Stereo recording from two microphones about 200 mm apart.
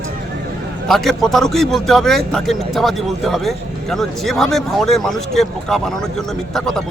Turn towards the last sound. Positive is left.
turn(degrees=0)  # may be behind; listen again after turning